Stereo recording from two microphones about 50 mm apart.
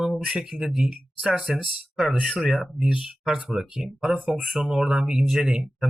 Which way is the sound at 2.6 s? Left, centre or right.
Centre.